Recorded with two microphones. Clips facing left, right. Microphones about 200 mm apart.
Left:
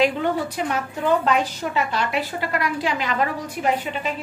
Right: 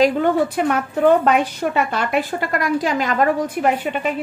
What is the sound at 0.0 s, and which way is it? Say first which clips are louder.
A woman's voice: right 5 dB; 50° right (ahead or behind).